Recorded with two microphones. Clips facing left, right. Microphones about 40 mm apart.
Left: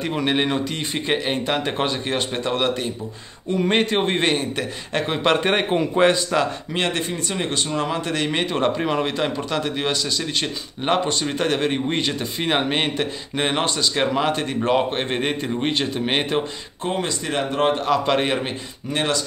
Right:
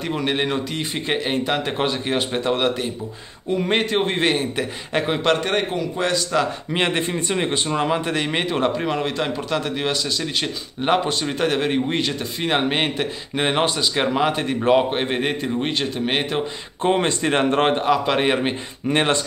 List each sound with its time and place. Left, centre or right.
0.0 s speech: centre
5.4 s a man's voice: centre
5.7 s a man's voice: left
6.7 s speech: centre
16.8 s speech: right
17.8 s a man's voice: centre
18.9 s speech: right